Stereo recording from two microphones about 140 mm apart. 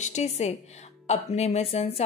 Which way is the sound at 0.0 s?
55° left (ahead or behind).